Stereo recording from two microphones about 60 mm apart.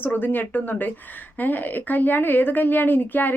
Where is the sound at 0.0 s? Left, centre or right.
Left.